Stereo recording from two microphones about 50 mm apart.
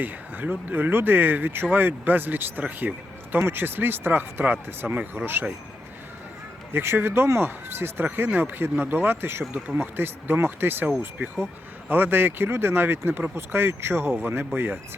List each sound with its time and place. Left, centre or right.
0.0 s speech: right
3.4 s speech: right
6.7 s speech: right